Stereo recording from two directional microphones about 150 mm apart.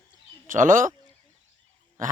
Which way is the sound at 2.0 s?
60° right (ahead or behind).